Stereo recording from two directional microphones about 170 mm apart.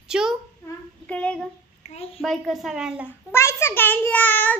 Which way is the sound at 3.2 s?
15° left (ahead or behind).